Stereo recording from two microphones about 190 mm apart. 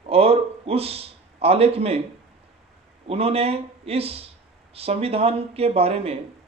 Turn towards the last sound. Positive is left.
turn(degrees=-30)  # may be behind; listen again after turning